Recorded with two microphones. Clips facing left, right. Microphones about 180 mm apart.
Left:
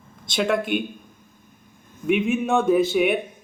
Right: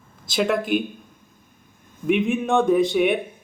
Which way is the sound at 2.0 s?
Centre (ahead or behind).